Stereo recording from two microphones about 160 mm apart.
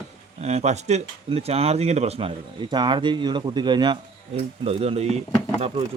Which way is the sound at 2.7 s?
30° right (ahead or behind).